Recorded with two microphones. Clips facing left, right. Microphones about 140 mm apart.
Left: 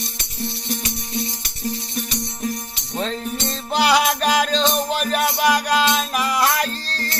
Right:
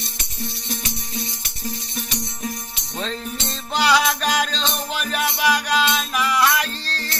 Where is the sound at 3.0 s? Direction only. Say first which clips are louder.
Left 3 dB; 55° left (ahead or behind).